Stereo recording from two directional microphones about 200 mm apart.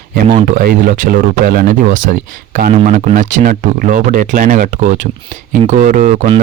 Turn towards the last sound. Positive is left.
turn(degrees=-35)  # may be behind; listen again after turning